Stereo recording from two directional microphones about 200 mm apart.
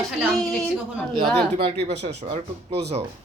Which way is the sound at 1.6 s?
30° right (ahead or behind).